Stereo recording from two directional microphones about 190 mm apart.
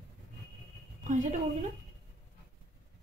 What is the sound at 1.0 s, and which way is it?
Speech, 40° right (ahead or behind).